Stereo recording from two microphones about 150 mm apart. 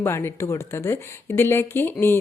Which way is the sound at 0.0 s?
15° left (ahead or behind).